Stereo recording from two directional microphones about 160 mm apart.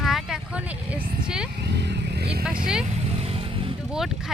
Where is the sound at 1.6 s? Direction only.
90° right.